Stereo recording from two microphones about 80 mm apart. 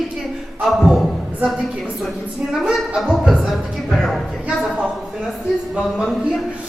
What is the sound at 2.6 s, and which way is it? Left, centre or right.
A woman's voice, centre.